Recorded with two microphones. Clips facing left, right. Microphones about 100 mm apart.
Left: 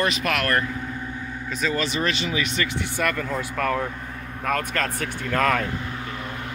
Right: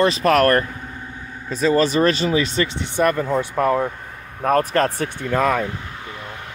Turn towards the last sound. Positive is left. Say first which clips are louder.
# right 3 dB
turn(degrees=-10)  # may be behind; listen again after turning